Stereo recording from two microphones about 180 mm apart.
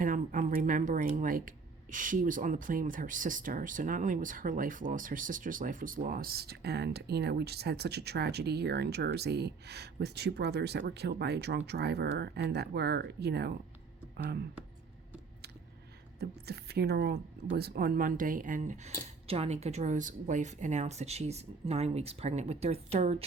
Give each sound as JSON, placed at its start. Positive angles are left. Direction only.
{"t": 0.0, "sound": "speech", "side_deg": -45}
{"t": 16.2, "sound": "speech", "side_deg": -65}